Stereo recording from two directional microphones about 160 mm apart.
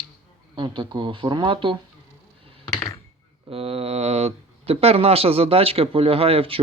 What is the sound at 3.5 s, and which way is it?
Speech, 35° right (ahead or behind).